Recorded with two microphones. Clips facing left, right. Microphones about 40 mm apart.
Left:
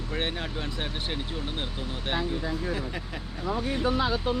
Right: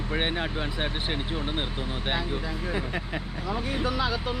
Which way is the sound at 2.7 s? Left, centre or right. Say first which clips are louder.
Right 2 dB; right.